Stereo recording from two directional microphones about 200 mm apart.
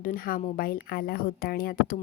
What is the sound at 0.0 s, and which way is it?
A woman's voice, 45° left (ahead or behind).